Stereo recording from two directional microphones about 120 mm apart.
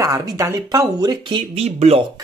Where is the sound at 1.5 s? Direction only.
60° right (ahead or behind).